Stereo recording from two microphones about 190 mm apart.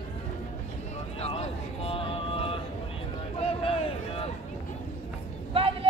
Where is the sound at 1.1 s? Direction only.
35° left (ahead or behind).